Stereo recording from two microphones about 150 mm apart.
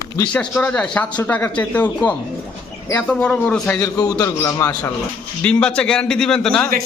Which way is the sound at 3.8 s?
25° left (ahead or behind).